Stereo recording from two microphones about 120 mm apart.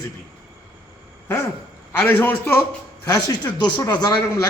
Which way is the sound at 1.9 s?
20° left (ahead or behind).